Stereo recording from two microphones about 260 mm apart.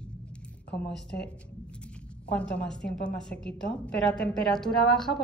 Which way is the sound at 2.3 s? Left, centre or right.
Centre.